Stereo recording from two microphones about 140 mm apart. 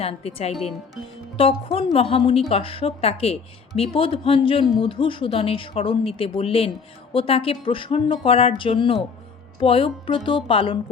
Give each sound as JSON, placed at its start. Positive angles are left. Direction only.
{"t": 0.0, "sound": "speech", "side_deg": 45}